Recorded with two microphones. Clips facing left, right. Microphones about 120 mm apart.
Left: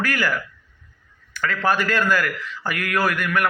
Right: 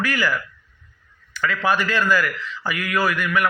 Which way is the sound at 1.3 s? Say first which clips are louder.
Even; 45° left (ahead or behind).